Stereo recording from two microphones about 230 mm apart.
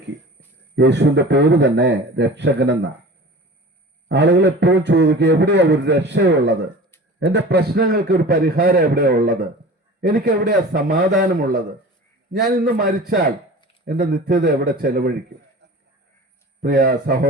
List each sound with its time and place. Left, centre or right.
0.8 s a man's voice: right
4.1 s a man's voice: right
16.6 s a man's voice: right